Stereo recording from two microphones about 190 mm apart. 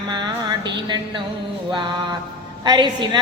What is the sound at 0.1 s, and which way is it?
Mantra, 25° right (ahead or behind).